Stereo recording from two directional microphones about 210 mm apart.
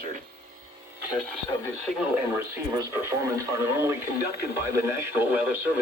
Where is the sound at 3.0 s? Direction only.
15° right (ahead or behind).